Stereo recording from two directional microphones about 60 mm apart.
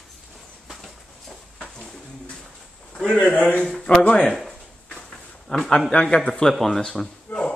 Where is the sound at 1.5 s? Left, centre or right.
Centre.